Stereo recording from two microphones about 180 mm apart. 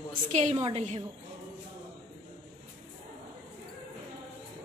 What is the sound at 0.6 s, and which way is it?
Speech, 35° right (ahead or behind).